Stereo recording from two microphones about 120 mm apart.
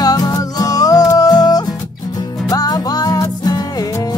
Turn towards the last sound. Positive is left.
turn(degrees=30)  # may be behind; listen again after turning